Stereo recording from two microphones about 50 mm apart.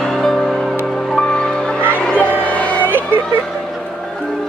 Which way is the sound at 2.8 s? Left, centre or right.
Right.